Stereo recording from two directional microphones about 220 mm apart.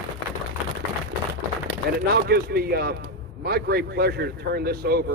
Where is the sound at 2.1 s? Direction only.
45° right (ahead or behind).